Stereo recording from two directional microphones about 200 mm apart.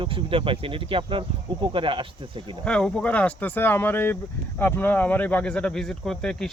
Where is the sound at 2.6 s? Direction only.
5° left (ahead or behind).